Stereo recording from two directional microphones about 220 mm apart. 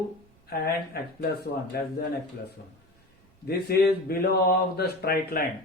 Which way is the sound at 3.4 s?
45° left (ahead or behind).